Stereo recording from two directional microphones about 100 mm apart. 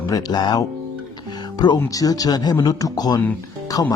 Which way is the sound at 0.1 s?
40° left (ahead or behind).